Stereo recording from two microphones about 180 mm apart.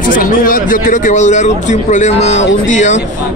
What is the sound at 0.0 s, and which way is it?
Speech, 50° left (ahead or behind).